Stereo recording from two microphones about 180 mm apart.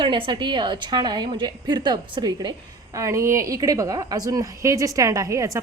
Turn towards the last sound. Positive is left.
turn(degrees=-15)  # may be behind; listen again after turning